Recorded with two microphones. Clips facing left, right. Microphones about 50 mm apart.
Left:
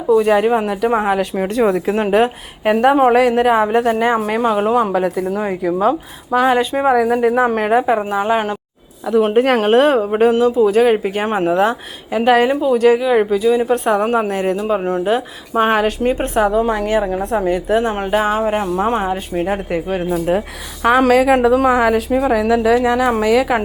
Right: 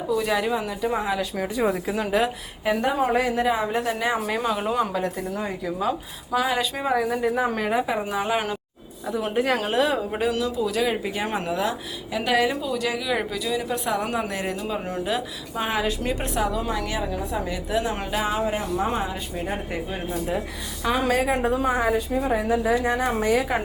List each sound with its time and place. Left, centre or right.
0.1 s speech: left
0.7 s a woman's voice: left
3.7 s speech: left
4.9 s speech: left
5.8 s speech: left
6.9 s speech: left
9.2 s speech: left
17.7 s speech: left
19.5 s a woman's voice: left